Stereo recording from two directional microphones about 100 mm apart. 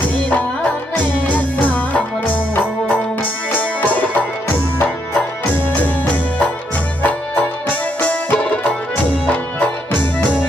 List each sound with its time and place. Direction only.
0.3 s music: 15° left (ahead or behind)
3.2 s tabla: 15° left (ahead or behind)
4.7 s music: 15° left (ahead or behind)